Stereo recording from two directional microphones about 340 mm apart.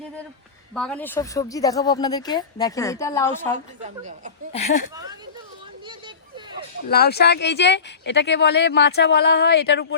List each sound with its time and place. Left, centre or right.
0.7 s speech: centre
3.8 s speech: right
4.5 s speech: centre
6.8 s speech: left